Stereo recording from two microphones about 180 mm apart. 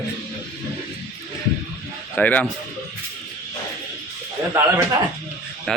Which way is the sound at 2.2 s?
10° left (ahead or behind).